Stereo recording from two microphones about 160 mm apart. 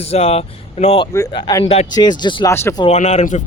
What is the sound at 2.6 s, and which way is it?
Speech, 15° left (ahead or behind).